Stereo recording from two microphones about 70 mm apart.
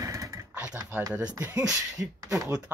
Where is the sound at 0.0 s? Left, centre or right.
Right.